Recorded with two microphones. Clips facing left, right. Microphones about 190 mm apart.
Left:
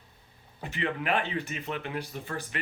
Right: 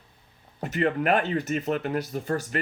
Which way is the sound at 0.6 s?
45° right (ahead or behind).